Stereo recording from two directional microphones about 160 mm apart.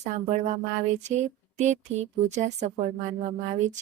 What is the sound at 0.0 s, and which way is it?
Speech, 45° right (ahead or behind).